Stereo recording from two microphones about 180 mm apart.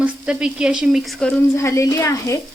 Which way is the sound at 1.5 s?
15° left (ahead or behind).